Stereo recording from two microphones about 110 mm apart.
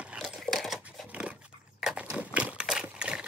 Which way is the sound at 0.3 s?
Centre (ahead or behind).